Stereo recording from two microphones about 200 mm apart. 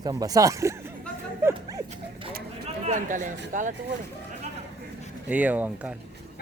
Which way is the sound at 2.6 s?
35° right (ahead or behind).